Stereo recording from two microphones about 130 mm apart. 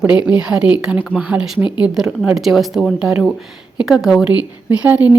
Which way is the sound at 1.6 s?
35° left (ahead or behind).